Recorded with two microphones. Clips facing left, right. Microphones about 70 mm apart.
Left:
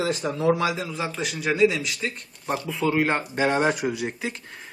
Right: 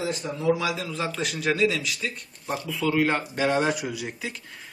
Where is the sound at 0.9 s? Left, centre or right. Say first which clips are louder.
Even; centre.